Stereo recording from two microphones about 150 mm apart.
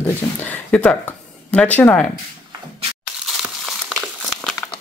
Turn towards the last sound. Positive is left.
turn(degrees=0)  # may be behind; listen again after turning